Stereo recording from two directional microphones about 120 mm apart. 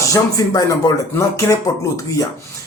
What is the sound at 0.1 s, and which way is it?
Speech, 30° left (ahead or behind).